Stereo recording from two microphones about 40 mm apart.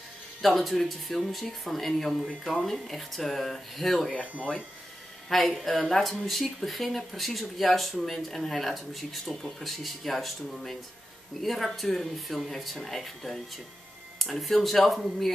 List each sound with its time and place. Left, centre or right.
0.4 s speech: centre
4.1 s speech: left
5.3 s speech: centre